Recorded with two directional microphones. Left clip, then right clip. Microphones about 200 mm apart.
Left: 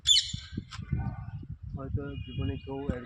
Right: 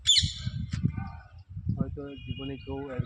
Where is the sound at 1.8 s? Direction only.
20° left (ahead or behind).